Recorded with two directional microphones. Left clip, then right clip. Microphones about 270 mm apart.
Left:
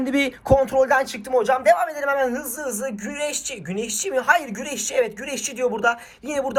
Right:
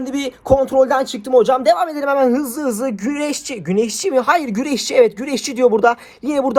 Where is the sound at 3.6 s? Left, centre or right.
Right.